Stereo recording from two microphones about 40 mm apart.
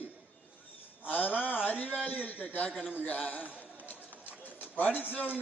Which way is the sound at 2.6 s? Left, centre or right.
Left.